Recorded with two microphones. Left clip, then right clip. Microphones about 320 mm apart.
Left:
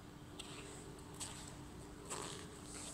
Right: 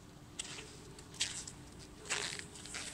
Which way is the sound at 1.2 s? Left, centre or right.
Right.